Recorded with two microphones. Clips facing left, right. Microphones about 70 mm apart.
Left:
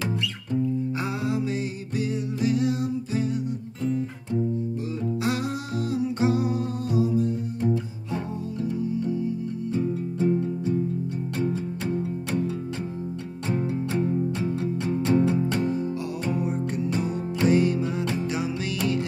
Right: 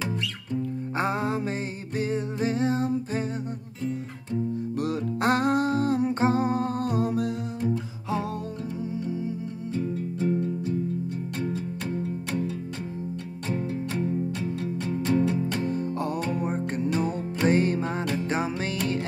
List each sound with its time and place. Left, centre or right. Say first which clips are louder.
0.9 s music: right 1 dB; right
4.7 s music: right 3 dB; right
5.2 s humming: right 9 dB; right
9.8 s music: left 2 dB; centre
13.5 s music: left 3 dB; left
16.3 s music: left 1 dB; right